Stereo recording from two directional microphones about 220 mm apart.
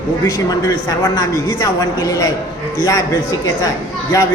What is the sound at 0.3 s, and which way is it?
A woman's voice, 15° left (ahead or behind).